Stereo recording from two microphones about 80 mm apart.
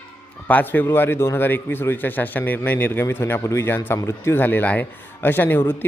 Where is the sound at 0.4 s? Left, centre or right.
Left.